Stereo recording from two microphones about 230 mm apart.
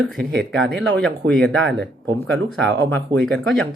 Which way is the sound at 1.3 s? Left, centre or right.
Centre.